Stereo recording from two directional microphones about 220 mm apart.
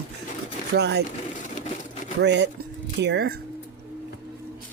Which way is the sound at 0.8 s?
50° right (ahead or behind).